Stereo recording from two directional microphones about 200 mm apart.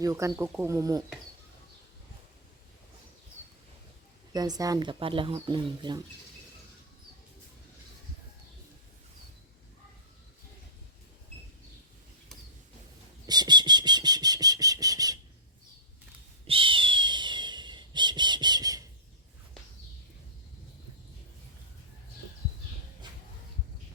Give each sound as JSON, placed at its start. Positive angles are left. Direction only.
{"t": 0.0, "sound": "speech", "side_deg": -15}
{"t": 4.3, "sound": "speech", "side_deg": -20}
{"t": 13.2, "sound": "whistle", "side_deg": -20}
{"t": 16.5, "sound": "owl", "side_deg": -25}
{"t": 23.0, "sound": "a sound", "side_deg": -25}